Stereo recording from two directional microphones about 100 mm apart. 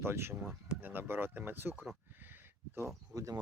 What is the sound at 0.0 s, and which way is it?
Speech, 25° right (ahead or behind).